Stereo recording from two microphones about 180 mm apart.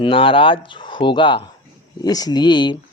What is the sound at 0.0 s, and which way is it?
A man's voice, 30° left (ahead or behind).